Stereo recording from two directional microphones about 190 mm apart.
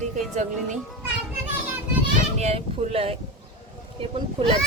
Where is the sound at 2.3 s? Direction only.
35° right (ahead or behind).